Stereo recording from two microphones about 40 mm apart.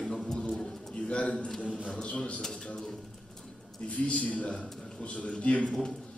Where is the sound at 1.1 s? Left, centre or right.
Left.